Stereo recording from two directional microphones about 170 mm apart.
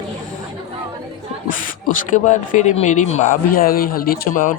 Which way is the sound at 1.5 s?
55° left (ahead or behind).